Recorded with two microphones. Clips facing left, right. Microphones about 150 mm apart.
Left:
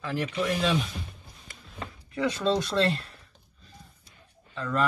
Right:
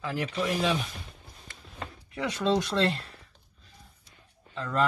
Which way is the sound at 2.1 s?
15° right (ahead or behind).